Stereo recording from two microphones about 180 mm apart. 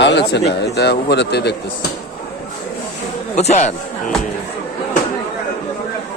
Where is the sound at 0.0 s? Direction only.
70° left (ahead or behind).